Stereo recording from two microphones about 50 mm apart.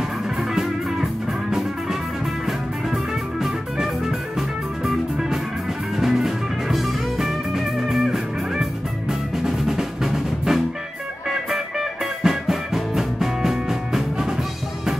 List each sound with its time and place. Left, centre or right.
2.4 s music: centre
12.2 s music: centre